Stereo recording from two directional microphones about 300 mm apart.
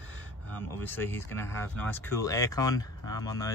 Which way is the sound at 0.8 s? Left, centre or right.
Centre.